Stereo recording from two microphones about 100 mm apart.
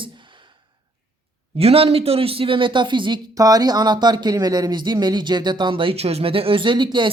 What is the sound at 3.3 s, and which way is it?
Speech, 35° right (ahead or behind).